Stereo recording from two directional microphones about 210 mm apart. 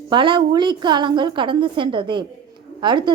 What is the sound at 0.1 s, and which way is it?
A woman's voice, 20° right (ahead or behind).